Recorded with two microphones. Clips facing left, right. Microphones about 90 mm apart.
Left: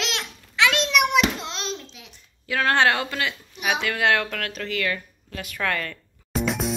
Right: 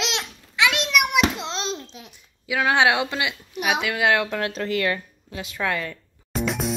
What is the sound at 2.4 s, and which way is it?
Speech, 10° right (ahead or behind).